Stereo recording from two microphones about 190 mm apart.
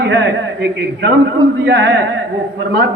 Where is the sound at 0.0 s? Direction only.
65° right (ahead or behind).